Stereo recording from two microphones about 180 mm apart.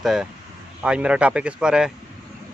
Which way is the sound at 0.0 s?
5° right (ahead or behind).